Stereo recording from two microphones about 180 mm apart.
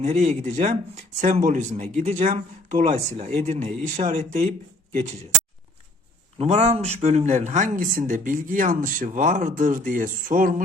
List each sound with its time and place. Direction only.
0.0 s speech: 40° right (ahead or behind)
6.4 s speech: 35° right (ahead or behind)